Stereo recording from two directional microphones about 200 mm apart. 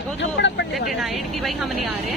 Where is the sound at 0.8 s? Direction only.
Centre (ahead or behind).